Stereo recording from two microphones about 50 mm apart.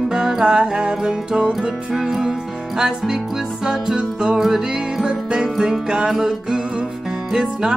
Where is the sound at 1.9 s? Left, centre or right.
Centre.